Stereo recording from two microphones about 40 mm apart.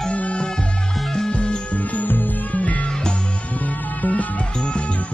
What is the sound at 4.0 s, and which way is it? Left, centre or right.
Music, left.